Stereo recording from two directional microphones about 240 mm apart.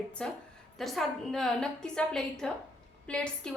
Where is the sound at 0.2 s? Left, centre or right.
Centre.